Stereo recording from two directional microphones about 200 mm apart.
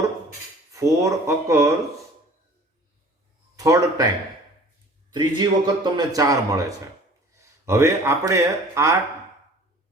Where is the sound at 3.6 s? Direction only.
15° right (ahead or behind).